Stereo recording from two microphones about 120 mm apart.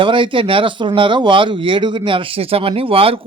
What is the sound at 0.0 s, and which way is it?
Speech, 45° right (ahead or behind).